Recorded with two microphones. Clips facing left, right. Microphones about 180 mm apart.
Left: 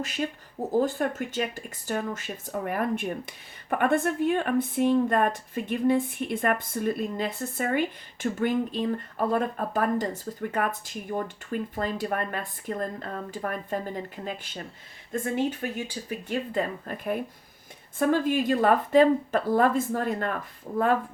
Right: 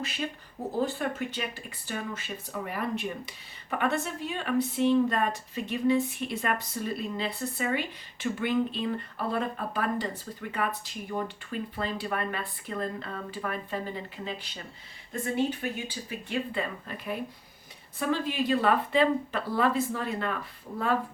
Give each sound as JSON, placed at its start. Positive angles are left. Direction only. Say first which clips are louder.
{"t": 0.0, "sound": "speech", "louder": "left 4 dB", "side_deg": 45}